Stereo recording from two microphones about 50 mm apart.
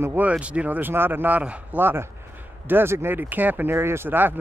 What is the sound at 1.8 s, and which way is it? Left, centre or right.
Speech, right.